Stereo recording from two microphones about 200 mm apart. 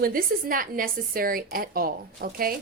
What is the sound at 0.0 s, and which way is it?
A woman's voice, 45° right (ahead or behind).